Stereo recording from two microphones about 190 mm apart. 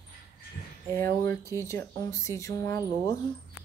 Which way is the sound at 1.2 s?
15° left (ahead or behind).